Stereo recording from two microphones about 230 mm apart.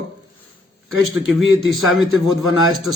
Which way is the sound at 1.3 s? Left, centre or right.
Centre.